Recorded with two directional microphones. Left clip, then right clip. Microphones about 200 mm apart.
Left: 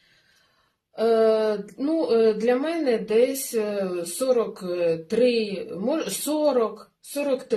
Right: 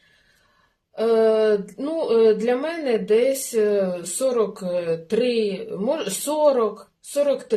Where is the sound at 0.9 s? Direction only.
35° right (ahead or behind).